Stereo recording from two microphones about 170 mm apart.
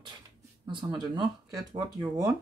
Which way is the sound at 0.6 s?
25° right (ahead or behind).